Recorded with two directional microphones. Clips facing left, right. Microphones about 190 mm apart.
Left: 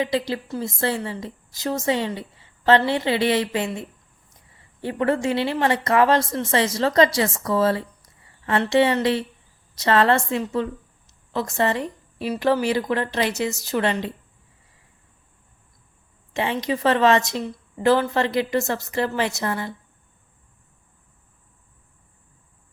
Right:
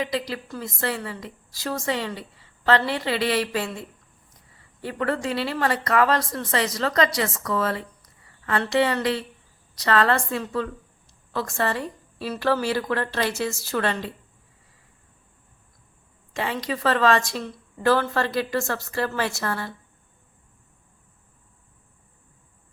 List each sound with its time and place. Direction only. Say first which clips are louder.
0.0 s a woman's voice: left 4 dB; 25° left (ahead or behind)
16.3 s a woman's voice: left 4 dB; 20° left (ahead or behind)